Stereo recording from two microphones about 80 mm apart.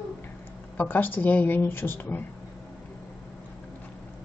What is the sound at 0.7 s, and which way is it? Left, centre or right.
A woman's voice, left.